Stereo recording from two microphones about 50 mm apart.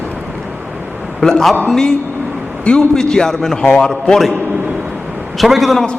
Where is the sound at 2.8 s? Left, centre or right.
Centre.